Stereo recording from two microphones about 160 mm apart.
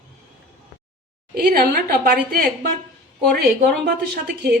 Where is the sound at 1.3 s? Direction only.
65° right (ahead or behind).